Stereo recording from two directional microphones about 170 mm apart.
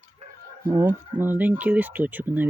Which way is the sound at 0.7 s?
15° right (ahead or behind).